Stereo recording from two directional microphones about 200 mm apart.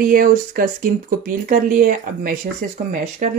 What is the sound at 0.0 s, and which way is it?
Speech, 45° right (ahead or behind).